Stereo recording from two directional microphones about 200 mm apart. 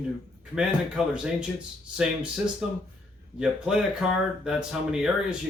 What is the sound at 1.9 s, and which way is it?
Speech, 5° right (ahead or behind).